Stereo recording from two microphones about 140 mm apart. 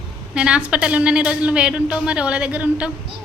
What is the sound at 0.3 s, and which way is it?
A woman's voice, 5° right (ahead or behind).